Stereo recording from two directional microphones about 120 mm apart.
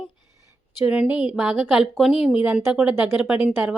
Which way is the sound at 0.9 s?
10° right (ahead or behind).